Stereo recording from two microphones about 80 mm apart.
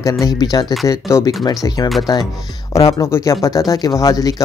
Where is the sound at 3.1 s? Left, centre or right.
Left.